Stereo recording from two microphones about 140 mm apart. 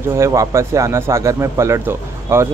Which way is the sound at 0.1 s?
20° right (ahead or behind).